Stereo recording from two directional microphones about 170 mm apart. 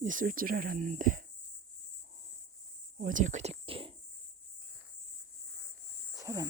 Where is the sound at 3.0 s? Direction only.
50° right (ahead or behind); by 3.9 s 35° right (ahead or behind).